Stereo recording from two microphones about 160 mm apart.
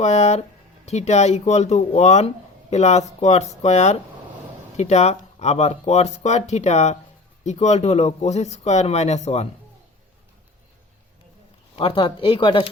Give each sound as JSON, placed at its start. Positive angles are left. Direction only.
{"t": 0.0, "sound": "speech", "side_deg": 45}
{"t": 11.8, "sound": "speech", "side_deg": 30}